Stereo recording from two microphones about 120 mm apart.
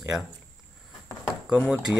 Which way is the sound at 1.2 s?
5° right (ahead or behind).